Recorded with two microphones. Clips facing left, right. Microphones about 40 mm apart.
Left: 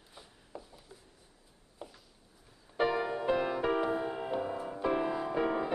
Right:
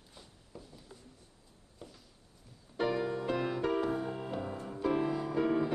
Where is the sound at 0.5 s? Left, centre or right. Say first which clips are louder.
Left 4 dB; left.